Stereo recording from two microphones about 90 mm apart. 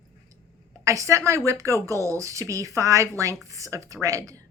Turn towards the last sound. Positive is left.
turn(degrees=-40)  # may be behind; listen again after turning